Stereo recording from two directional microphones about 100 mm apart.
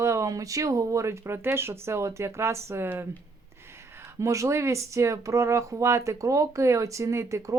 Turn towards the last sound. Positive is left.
turn(degrees=-30)  # may be behind; listen again after turning